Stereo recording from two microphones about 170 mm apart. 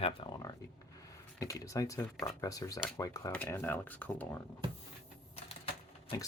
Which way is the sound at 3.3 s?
10° left (ahead or behind).